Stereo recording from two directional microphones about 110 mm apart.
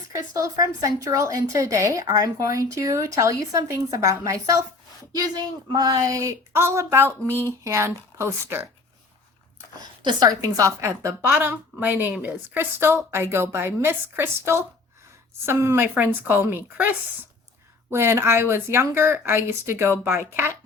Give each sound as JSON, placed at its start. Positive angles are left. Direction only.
{"t": 0.1, "sound": "a woman's voice", "side_deg": -30}
{"t": 5.7, "sound": "a woman's voice", "side_deg": -35}
{"t": 10.1, "sound": "a woman's voice", "side_deg": -40}
{"t": 17.9, "sound": "a woman's voice", "side_deg": -25}